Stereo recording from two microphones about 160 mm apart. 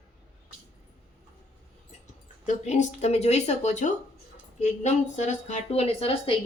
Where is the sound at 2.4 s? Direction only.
45° left (ahead or behind).